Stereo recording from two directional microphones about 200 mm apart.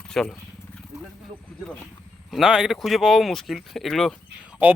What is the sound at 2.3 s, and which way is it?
Speech, centre (ahead or behind).